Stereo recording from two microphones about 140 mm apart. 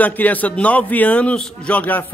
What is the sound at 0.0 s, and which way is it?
A man's voice, 10° left (ahead or behind).